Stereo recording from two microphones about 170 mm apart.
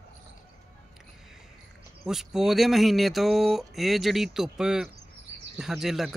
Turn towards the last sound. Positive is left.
turn(degrees=0)  # may be behind; listen again after turning